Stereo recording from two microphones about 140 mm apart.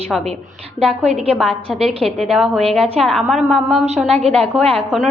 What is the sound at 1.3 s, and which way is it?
A woman's voice, centre (ahead or behind).